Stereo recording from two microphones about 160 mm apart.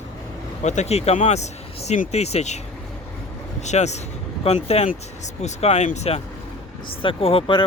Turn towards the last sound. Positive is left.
turn(degrees=35)  # may be behind; listen again after turning